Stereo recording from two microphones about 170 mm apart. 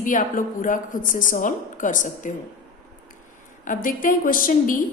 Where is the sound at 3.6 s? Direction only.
55° left (ahead or behind).